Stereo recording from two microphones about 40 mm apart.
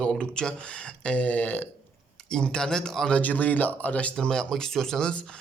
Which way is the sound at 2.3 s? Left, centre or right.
Centre.